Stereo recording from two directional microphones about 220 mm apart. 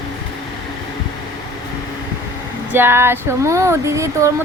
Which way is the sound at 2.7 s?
10° right (ahead or behind).